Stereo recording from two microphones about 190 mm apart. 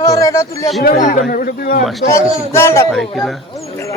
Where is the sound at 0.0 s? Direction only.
20° left (ahead or behind).